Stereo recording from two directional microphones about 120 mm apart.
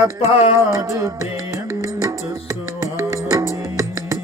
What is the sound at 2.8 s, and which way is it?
Music, 25° right (ahead or behind).